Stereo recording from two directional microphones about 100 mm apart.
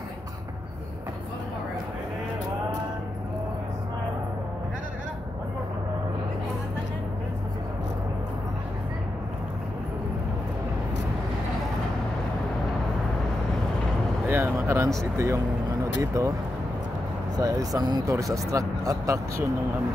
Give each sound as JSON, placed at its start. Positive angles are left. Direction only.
{"t": 14.2, "sound": "a sound", "side_deg": -25}
{"t": 15.0, "sound": "speech", "side_deg": -30}
{"t": 17.4, "sound": "speech", "side_deg": -40}